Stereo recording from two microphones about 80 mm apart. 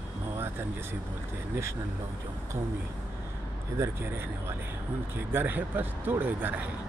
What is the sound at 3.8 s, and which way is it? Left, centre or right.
Speech, right.